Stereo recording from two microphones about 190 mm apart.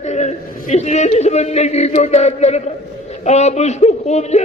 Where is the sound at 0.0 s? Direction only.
35° left (ahead or behind).